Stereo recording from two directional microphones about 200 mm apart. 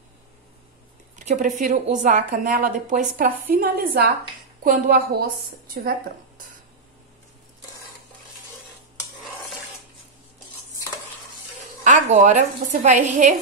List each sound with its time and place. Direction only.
1.1 s a woman's voice: 40° right (ahead or behind)
11.8 s a woman's voice: 35° right (ahead or behind)